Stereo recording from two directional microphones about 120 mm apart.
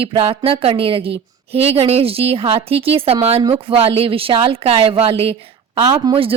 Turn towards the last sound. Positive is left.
turn(degrees=-30)  # may be behind; listen again after turning